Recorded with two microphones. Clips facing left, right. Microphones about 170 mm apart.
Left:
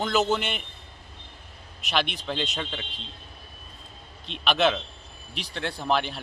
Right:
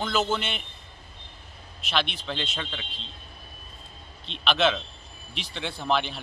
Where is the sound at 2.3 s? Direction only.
5° left (ahead or behind).